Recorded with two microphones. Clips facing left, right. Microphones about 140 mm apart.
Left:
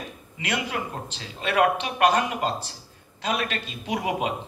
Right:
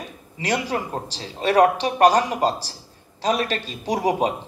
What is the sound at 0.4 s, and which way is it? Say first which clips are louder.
A man's voice: right 5 dB; 35° right (ahead or behind).